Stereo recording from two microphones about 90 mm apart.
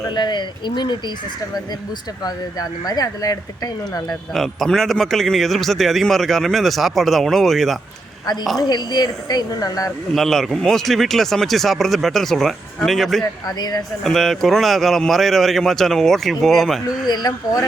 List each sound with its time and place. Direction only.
0.1 s speech: 55° left (ahead or behind)
2.2 s speech: 45° left (ahead or behind)
4.4 s a man's voice: 5° left (ahead or behind)
8.5 s speech: 45° left (ahead or behind)
10.2 s a man's voice: 5° left (ahead or behind)
13.6 s speech: 45° left (ahead or behind)
14.0 s a man's voice: centre (ahead or behind)
17.1 s speech: 45° left (ahead or behind)